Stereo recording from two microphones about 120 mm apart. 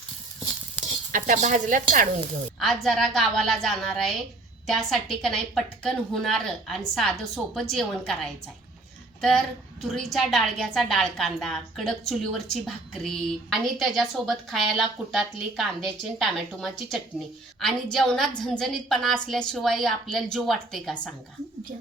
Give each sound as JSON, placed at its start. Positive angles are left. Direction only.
{"t": 1.1, "sound": "speech", "side_deg": -90}
{"t": 2.6, "sound": "a woman's voice", "side_deg": 0}
{"t": 9.9, "sound": "a woman's voice", "side_deg": 0}